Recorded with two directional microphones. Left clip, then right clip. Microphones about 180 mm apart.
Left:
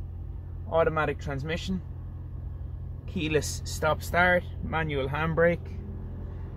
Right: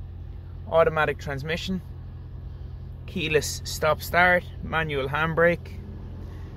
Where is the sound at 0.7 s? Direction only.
15° right (ahead or behind).